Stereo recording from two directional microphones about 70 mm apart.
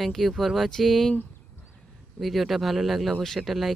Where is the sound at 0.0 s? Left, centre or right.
Centre.